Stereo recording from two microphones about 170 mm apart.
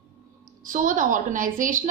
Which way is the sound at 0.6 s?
50° right (ahead or behind).